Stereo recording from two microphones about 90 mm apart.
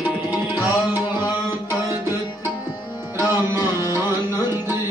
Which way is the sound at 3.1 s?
45° left (ahead or behind).